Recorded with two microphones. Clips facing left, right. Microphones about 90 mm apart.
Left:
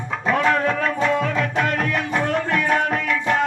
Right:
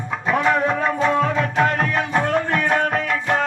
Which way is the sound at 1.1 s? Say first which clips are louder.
Right 2 dB; 30° right (ahead or behind).